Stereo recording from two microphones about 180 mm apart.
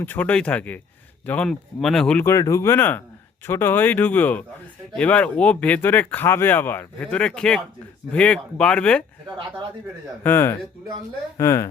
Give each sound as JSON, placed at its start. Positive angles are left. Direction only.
{"t": 0.0, "sound": "speech", "side_deg": 10}
{"t": 2.2, "sound": "speech", "side_deg": 15}
{"t": 10.2, "sound": "speech", "side_deg": 10}